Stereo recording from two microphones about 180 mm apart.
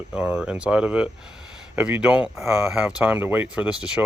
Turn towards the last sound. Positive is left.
turn(degrees=-5)  # may be behind; listen again after turning